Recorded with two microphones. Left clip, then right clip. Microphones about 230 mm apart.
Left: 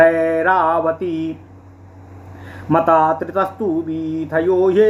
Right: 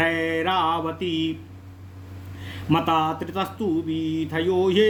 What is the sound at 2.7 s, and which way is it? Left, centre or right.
Speech, right.